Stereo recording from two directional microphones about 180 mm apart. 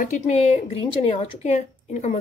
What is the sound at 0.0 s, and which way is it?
Speech, 45° left (ahead or behind).